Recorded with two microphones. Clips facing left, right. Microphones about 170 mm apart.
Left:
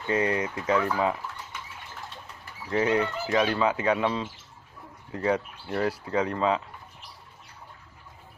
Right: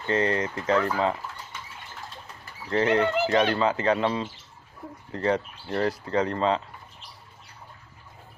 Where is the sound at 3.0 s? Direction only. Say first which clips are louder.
Right 6 dB; 70° right (ahead or behind).